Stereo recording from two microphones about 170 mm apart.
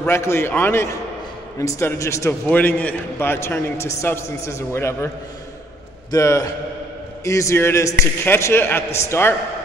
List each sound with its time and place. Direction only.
0.0 s a man's voice: 15° left (ahead or behind)
6.1 s a man's voice: 20° left (ahead or behind)